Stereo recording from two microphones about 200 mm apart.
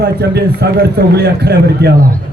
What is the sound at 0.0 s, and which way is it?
A man's voice, 55° right (ahead or behind).